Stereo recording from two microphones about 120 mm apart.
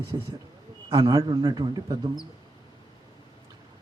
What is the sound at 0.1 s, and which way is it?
A man's voice, 35° right (ahead or behind).